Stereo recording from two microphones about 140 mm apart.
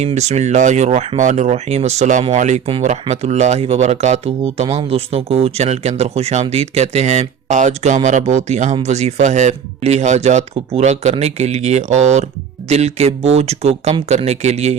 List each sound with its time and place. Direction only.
0.0 s speech: 55° right (ahead or behind)